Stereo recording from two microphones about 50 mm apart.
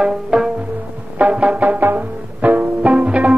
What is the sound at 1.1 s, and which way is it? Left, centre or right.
Music, right.